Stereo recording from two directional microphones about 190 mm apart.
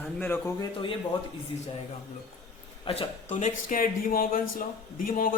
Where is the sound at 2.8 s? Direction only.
30° left (ahead or behind).